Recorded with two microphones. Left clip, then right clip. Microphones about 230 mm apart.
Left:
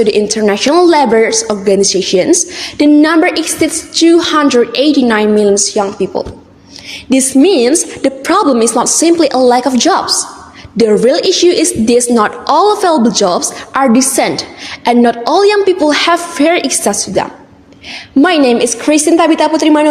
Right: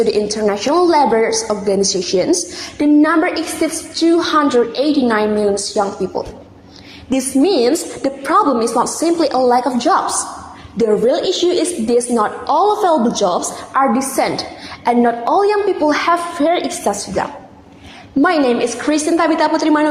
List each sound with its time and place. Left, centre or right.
0.0 s a woman's voice: left
18.2 s a woman's voice: left